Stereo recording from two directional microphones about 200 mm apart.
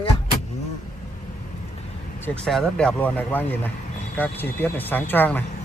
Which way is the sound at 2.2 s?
5° left (ahead or behind).